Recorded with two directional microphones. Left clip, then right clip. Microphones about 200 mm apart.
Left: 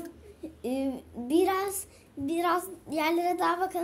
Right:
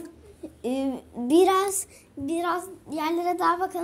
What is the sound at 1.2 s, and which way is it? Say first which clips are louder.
Speech: right 6 dB; 20° right (ahead or behind).